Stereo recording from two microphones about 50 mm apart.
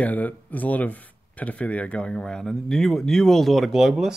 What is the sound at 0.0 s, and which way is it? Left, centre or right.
Speech, left.